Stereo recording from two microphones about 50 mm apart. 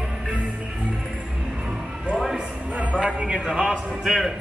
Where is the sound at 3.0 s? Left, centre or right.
Centre.